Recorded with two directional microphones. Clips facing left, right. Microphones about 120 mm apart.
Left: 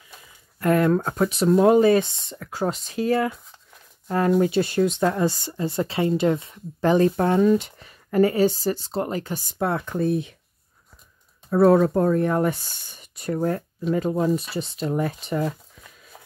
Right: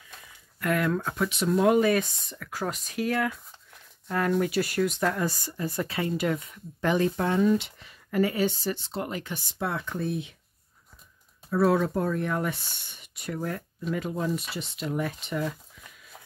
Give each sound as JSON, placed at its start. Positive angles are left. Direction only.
{"t": 0.6, "sound": "speech", "side_deg": 35}
{"t": 4.4, "sound": "speech", "side_deg": 25}
{"t": 11.5, "sound": "speech", "side_deg": 40}